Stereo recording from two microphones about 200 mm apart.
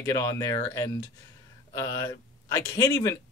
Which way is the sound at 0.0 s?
15° left (ahead or behind).